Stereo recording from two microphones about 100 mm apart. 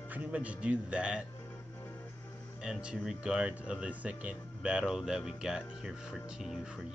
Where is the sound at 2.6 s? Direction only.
10° right (ahead or behind).